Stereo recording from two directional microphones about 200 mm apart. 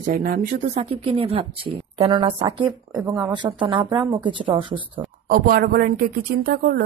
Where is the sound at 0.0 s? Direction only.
40° right (ahead or behind); by 4.7 s 25° right (ahead or behind).